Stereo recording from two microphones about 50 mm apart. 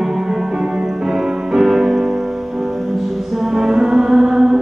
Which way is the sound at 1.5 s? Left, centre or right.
Centre.